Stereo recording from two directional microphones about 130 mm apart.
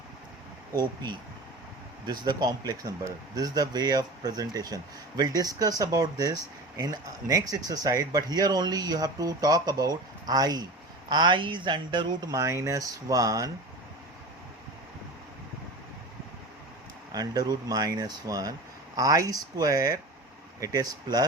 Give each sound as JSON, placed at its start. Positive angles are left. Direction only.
{"t": 0.7, "sound": "speech", "side_deg": -30}
{"t": 17.1, "sound": "speech", "side_deg": -30}